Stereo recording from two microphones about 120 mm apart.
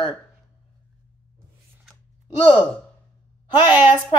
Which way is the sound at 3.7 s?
40° left (ahead or behind).